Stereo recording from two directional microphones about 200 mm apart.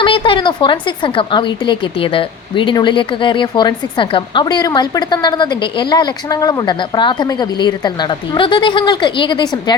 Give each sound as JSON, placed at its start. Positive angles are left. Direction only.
{"t": 0.0, "sound": "a woman's voice", "side_deg": 25}